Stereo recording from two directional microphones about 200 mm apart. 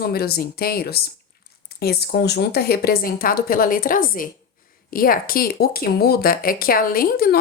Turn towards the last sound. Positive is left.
turn(degrees=50)  # may be behind; listen again after turning